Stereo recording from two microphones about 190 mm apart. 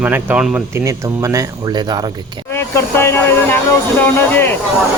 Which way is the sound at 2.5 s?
10° left (ahead or behind).